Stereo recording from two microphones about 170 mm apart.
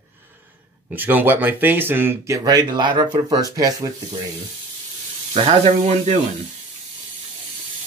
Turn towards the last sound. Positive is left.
turn(degrees=-40)  # may be behind; listen again after turning